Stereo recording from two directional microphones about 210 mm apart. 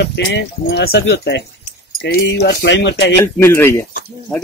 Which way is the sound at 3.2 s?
10° left (ahead or behind).